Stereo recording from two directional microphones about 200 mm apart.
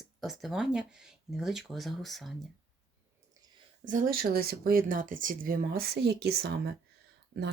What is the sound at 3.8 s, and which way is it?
Speech, 40° right (ahead or behind).